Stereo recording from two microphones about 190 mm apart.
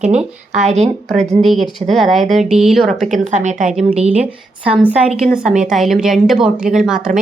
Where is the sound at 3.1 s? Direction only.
40° right (ahead or behind).